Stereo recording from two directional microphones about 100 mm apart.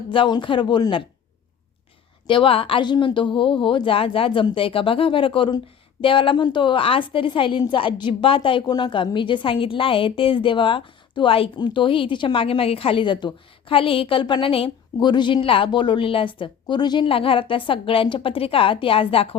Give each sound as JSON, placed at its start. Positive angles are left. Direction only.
{"t": 0.1, "sound": "a woman's voice", "side_deg": 55}
{"t": 2.2, "sound": "a woman's voice", "side_deg": 60}
{"t": 11.5, "sound": "a woman's voice", "side_deg": 50}